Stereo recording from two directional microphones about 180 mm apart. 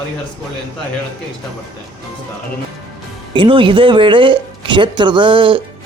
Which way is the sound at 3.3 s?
30° right (ahead or behind).